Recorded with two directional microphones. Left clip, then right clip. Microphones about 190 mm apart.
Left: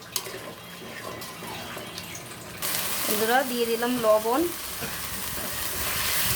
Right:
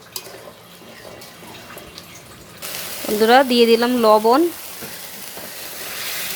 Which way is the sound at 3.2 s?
40° right (ahead or behind).